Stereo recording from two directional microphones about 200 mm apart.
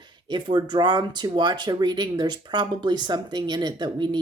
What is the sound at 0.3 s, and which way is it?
Speech, 20° right (ahead or behind).